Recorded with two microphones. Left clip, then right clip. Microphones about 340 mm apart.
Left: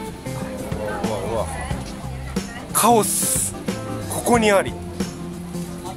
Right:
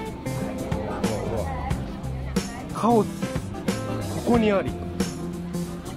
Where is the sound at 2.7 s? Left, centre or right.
Left.